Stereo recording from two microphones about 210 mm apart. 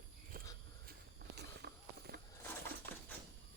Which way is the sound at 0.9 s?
50° right (ahead or behind).